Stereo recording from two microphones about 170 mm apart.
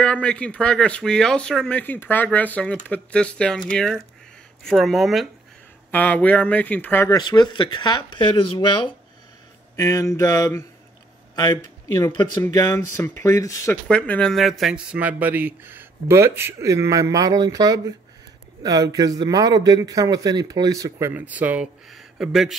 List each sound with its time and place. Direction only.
0.0 s speech: 5° left (ahead or behind)
5.9 s speech: 10° left (ahead or behind)
7.2 s speech: 25° left (ahead or behind)
9.8 s speech: 20° left (ahead or behind)
13.8 s a man's voice: 5° left (ahead or behind)